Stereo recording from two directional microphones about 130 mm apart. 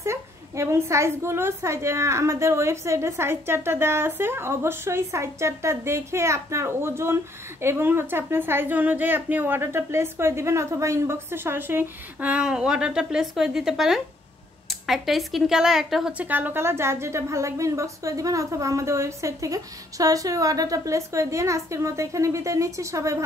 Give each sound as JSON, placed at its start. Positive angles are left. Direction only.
{"t": 0.0, "sound": "a woman's voice", "side_deg": -20}